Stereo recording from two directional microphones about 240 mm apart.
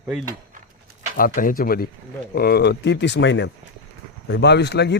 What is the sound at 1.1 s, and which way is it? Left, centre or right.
Speech, left.